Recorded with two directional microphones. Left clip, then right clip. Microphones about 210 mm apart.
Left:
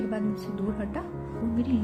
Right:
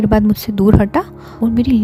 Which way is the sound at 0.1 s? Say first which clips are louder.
Right 16 dB; 55° right (ahead or behind).